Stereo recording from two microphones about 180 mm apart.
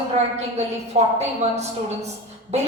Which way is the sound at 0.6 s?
35° right (ahead or behind).